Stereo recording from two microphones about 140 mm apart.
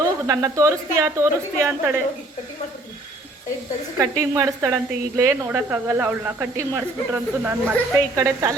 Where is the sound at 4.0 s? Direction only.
25° right (ahead or behind).